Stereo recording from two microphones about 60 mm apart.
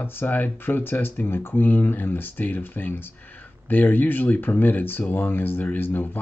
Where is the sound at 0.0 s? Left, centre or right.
Left.